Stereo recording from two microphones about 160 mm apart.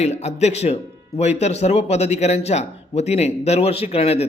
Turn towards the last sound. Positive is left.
turn(degrees=40)  # may be behind; listen again after turning